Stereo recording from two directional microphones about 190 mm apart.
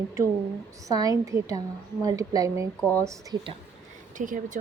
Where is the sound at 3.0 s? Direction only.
20° right (ahead or behind).